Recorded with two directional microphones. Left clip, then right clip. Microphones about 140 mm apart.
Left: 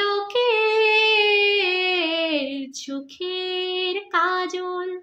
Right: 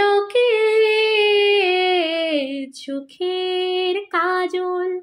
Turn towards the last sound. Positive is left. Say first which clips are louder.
# right 4 dB
turn(degrees=-25)  # may be behind; listen again after turning